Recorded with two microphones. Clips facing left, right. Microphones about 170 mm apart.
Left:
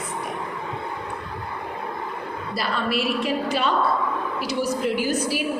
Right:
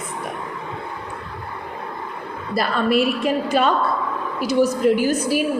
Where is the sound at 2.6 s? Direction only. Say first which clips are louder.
Right 7 dB; 50° right (ahead or behind).